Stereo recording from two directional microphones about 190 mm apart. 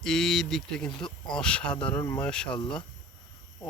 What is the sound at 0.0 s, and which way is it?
Speech, centre (ahead or behind).